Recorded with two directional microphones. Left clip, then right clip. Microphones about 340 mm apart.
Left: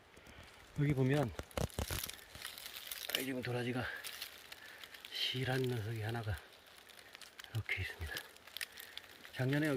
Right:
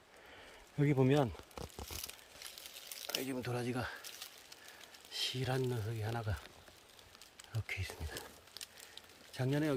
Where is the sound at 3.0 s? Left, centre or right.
Centre.